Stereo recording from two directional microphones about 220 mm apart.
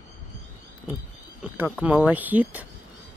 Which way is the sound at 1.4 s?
5° right (ahead or behind).